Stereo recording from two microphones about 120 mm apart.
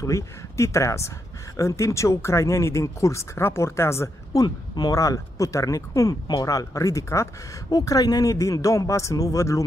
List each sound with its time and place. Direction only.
0.0 s speech: 25° left (ahead or behind)